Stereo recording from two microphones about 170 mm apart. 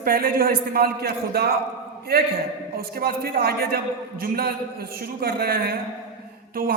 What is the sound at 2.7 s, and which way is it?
A man's voice, 60° right (ahead or behind).